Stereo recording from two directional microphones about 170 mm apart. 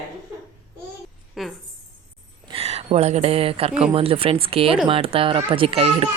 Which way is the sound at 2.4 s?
35° right (ahead or behind).